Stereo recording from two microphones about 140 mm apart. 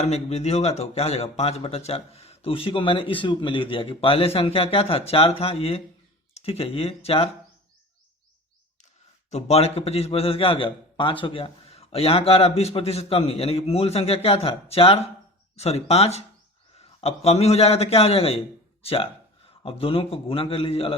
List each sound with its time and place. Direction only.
0.0 s a man's voice: 50° left (ahead or behind)
9.3 s a man's voice: 50° left (ahead or behind)